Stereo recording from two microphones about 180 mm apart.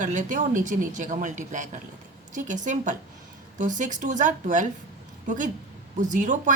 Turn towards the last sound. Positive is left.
turn(degrees=-45)  # may be behind; listen again after turning